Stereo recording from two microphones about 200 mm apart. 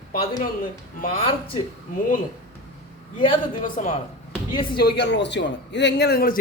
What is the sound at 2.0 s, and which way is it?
Speech, 40° left (ahead or behind).